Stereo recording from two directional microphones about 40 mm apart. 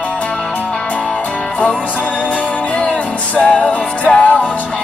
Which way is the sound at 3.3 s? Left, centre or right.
Left.